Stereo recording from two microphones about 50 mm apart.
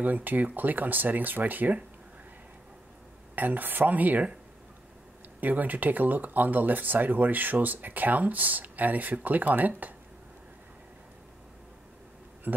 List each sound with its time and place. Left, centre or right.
0.0 s speech: right
3.3 s speech: right
5.4 s speech: right
12.5 s speech: right